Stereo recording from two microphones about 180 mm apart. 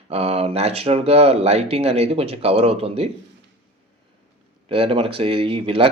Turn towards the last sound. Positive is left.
turn(degrees=-30)  # may be behind; listen again after turning